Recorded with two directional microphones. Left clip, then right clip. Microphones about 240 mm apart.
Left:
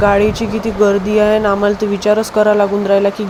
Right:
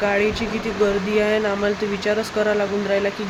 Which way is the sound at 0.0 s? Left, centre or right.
Left.